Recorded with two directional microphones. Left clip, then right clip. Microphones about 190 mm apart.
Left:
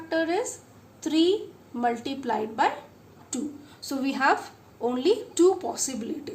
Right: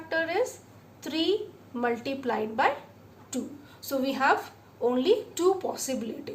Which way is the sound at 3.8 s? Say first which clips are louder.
Even; 25° left (ahead or behind).